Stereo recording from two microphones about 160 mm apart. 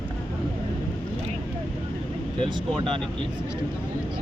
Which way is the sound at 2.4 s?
30° right (ahead or behind).